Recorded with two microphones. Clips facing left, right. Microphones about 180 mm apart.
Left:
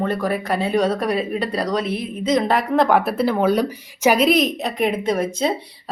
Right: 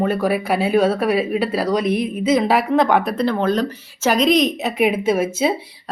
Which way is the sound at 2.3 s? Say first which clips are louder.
Right 1 dB; 5° right (ahead or behind).